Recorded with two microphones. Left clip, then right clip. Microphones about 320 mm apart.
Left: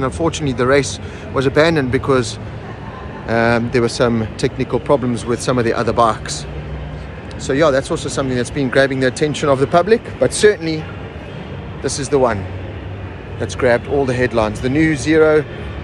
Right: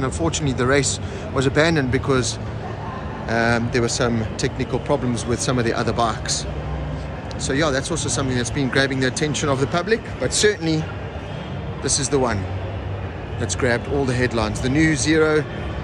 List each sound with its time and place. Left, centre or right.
0.0 s speech: centre
7.4 s speech: centre
11.8 s speech: centre
13.4 s speech: centre